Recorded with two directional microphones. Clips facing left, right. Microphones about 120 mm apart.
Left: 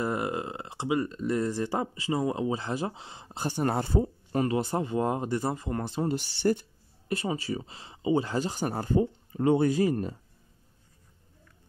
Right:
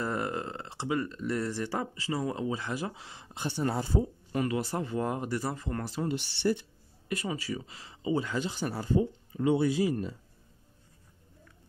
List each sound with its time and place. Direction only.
0.0 s speech: 15° left (ahead or behind)
3.3 s speech: 40° left (ahead or behind); by 4.0 s 60° left (ahead or behind)
4.3 s speech: 35° left (ahead or behind)
6.0 s speech: 40° left (ahead or behind)
7.1 s speech: 30° left (ahead or behind)
8.3 s speech: 40° left (ahead or behind)